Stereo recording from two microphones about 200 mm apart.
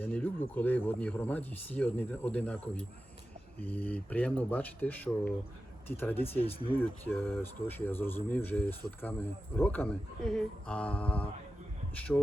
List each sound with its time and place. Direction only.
0.0 s speech: 10° left (ahead or behind)
6.4 s speech: 25° left (ahead or behind)
6.7 s speech: 10° left (ahead or behind)